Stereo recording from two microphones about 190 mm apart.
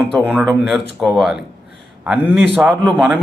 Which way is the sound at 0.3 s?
Centre (ahead or behind).